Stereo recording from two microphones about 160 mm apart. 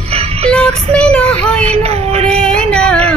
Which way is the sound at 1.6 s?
40° right (ahead or behind).